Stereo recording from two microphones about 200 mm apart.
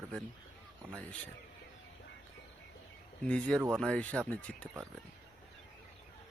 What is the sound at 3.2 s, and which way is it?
Speech, 5° left (ahead or behind).